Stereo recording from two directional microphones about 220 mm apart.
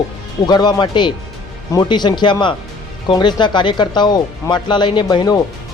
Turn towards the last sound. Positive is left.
turn(degrees=15)  # may be behind; listen again after turning